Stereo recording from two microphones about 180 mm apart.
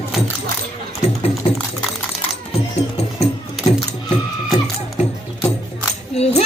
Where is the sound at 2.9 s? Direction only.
35° left (ahead or behind).